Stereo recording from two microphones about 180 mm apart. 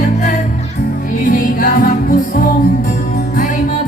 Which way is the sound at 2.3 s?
60° left (ahead or behind).